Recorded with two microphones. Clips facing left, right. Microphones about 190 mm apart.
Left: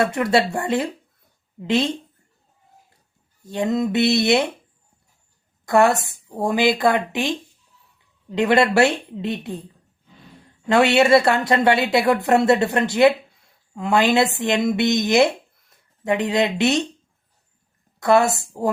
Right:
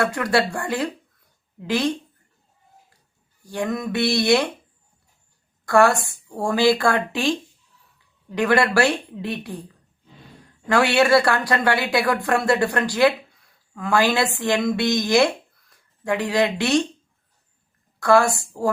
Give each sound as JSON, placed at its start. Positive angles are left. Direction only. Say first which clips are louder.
{"t": 0.0, "sound": "speech", "louder": "left 2 dB", "side_deg": 25}
{"t": 3.4, "sound": "speech", "louder": "left 4 dB", "side_deg": 20}
{"t": 5.6, "sound": "speech", "louder": "even", "side_deg": 20}
{"t": 10.7, "sound": "speech", "louder": "left 2 dB", "side_deg": 25}
{"t": 18.0, "sound": "speech", "louder": "even", "side_deg": 20}